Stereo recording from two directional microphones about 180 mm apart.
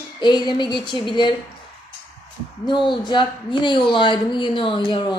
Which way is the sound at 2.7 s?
25° left (ahead or behind).